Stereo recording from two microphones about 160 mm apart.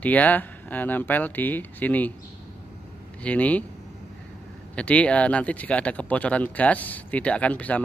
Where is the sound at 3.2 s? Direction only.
10° left (ahead or behind).